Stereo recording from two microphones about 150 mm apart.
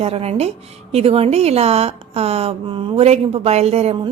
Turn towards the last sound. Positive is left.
turn(degrees=-45)  # may be behind; listen again after turning